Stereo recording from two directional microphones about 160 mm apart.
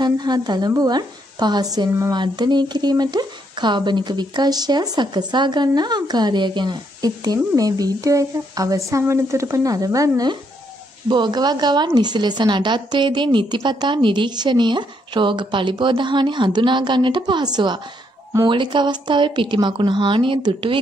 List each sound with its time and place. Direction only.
0.0 s a woman's voice: 25° right (ahead or behind)